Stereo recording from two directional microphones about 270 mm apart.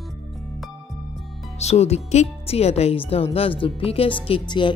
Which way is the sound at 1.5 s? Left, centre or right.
Left.